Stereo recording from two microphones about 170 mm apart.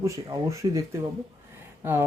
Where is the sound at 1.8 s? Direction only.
15° right (ahead or behind).